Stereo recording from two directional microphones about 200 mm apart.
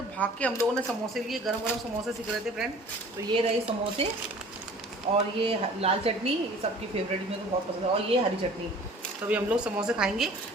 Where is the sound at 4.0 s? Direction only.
30° right (ahead or behind).